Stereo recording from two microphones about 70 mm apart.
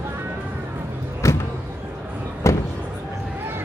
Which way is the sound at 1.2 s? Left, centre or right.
Left.